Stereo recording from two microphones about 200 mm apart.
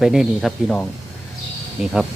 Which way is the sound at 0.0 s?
Centre (ahead or behind).